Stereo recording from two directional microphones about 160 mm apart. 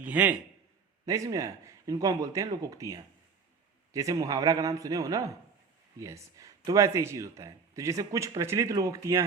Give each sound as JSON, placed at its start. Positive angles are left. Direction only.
{"t": 0.1, "sound": "a man's voice", "side_deg": -10}
{"t": 1.0, "sound": "speech", "side_deg": -20}